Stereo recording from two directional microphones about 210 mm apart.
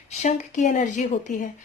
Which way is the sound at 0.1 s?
35° left (ahead or behind).